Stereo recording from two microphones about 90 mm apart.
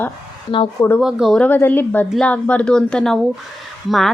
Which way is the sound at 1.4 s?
20° left (ahead or behind).